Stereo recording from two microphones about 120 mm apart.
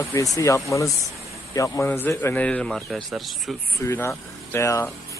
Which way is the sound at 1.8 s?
15° left (ahead or behind).